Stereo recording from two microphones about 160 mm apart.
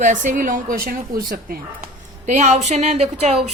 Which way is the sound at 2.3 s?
45° right (ahead or behind).